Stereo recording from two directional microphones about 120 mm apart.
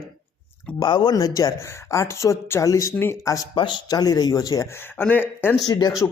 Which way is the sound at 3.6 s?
40° left (ahead or behind).